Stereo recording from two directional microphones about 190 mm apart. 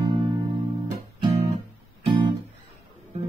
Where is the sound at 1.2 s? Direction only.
25° right (ahead or behind).